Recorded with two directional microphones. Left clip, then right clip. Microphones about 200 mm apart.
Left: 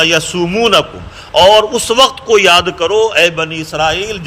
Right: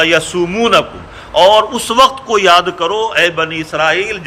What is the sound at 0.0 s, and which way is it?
A man's voice, 25° left (ahead or behind).